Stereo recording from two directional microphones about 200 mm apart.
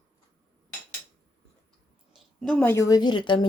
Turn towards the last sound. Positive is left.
turn(degrees=25)  # may be behind; listen again after turning